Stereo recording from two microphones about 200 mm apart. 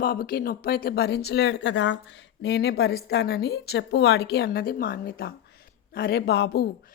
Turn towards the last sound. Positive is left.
turn(degrees=55)  # may be behind; listen again after turning